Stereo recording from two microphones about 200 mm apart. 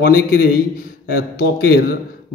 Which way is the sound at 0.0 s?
50° left (ahead or behind).